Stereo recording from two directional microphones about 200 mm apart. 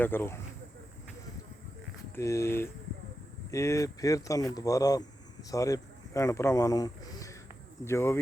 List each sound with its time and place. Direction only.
0.0 s speech: 10° left (ahead or behind)
2.1 s speech: 15° left (ahead or behind)